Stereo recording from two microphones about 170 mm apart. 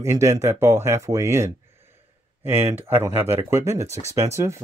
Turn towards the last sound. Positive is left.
turn(degrees=-15)  # may be behind; listen again after turning